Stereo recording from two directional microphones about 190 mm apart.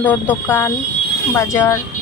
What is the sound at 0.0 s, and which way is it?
Speech, 10° left (ahead or behind).